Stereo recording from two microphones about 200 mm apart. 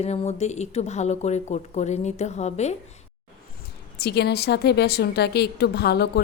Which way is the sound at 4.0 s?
55° left (ahead or behind).